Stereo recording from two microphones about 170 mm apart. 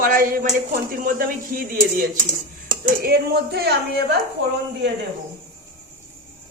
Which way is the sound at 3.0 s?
70° right (ahead or behind).